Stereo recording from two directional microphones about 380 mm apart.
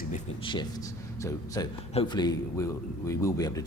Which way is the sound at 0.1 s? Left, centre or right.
Centre.